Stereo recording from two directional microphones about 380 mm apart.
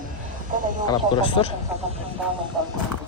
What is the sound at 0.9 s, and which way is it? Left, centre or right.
Speech, centre.